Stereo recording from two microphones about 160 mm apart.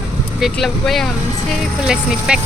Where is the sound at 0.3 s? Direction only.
Centre (ahead or behind).